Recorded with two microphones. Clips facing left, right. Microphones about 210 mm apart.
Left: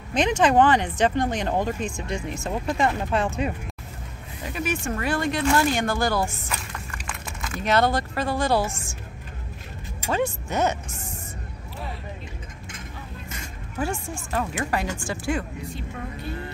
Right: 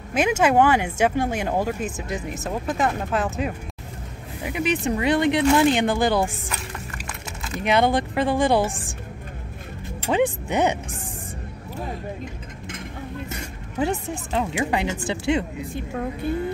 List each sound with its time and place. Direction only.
0.1 s speech: 10° right (ahead or behind)
4.4 s a sound: 15° right (ahead or behind)
4.8 s speech: 20° right (ahead or behind)
8.6 s a woman's voice: 35° right (ahead or behind)
10.1 s speech: 15° right (ahead or behind)
13.7 s speech: 20° right (ahead or behind)
15.7 s speech: 55° right (ahead or behind)